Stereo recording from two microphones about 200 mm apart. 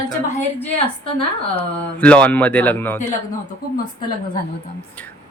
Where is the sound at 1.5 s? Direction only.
5° left (ahead or behind).